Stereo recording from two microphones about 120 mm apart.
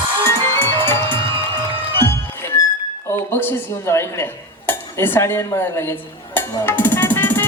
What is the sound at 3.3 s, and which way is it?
Dishes, 20° left (ahead or behind).